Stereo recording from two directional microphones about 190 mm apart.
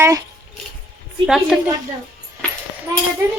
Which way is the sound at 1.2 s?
Centre (ahead or behind).